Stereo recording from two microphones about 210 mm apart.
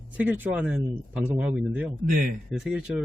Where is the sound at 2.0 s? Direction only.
40° right (ahead or behind).